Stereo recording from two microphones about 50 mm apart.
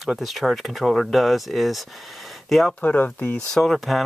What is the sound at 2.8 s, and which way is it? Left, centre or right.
Speech, left.